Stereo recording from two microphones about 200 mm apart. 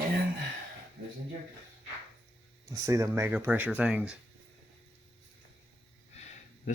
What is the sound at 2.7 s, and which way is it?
Speech, 15° right (ahead or behind).